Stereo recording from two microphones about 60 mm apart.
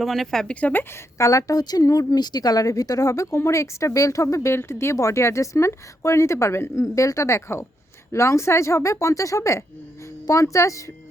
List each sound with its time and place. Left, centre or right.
0.0 s speech: centre
0.4 s speech: left
1.2 s a woman's voice: left
4.4 s speech: left
4.9 s a woman's voice: left